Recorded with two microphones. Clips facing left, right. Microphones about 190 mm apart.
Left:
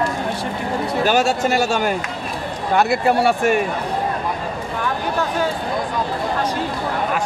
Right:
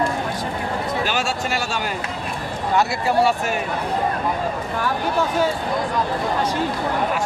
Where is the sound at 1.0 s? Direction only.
45° left (ahead or behind).